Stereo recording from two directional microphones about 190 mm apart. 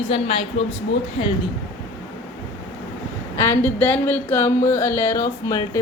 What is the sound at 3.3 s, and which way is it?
Music, 15° left (ahead or behind).